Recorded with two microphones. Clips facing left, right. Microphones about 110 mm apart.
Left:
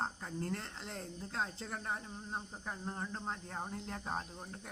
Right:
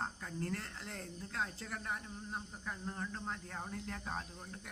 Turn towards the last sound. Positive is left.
turn(degrees=25)  # may be behind; listen again after turning